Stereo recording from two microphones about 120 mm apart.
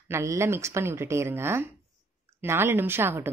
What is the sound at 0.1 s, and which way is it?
A woman's voice, 25° right (ahead or behind).